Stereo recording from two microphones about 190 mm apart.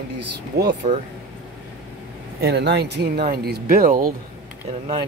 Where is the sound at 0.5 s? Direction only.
60° right (ahead or behind).